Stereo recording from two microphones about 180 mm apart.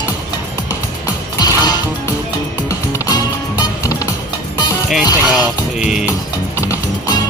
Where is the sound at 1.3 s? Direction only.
20° left (ahead or behind).